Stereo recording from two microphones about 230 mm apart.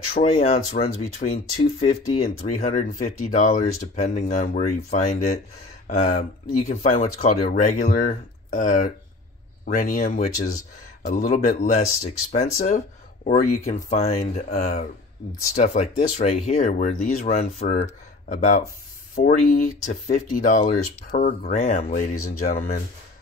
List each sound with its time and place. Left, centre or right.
0.1 s speech: left
2.4 s speech: left
22.1 s speech: left
22.5 s speech: left